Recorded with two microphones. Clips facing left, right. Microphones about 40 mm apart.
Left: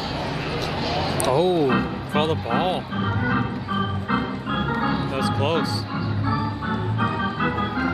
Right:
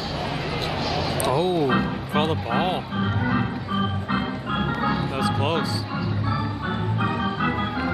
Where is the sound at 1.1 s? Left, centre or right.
Centre.